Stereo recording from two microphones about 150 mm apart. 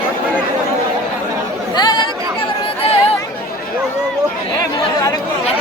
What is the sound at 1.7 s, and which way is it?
Chatter, 30° left (ahead or behind).